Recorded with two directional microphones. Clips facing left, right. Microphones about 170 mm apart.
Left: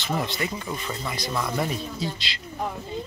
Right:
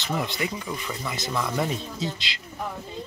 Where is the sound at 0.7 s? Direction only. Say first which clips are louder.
Left 1 dB; 25° left (ahead or behind).